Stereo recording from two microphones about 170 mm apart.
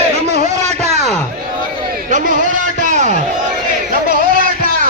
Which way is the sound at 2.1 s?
50° right (ahead or behind).